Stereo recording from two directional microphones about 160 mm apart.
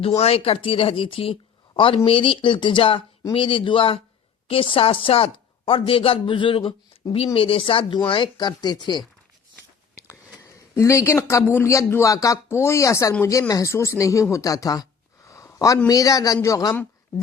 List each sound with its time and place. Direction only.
0.2 s a woman's voice: 40° left (ahead or behind)
10.8 s speech: 15° left (ahead or behind)